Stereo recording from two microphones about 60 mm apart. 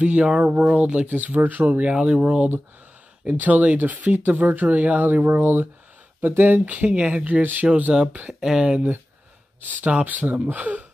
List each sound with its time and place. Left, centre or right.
0.0 s speech: right
1.1 s speech: right
9.6 s speech: right